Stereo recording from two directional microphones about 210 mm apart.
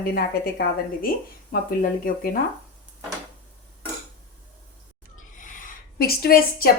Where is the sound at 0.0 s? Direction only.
45° left (ahead or behind).